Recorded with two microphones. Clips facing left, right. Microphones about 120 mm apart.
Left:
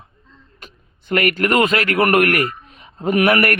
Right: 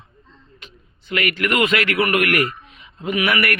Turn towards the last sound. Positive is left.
turn(degrees=50)  # may be behind; listen again after turning